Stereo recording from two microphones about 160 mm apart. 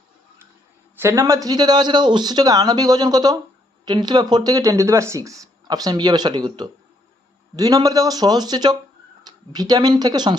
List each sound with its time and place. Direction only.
0.9 s speech: 15° right (ahead or behind)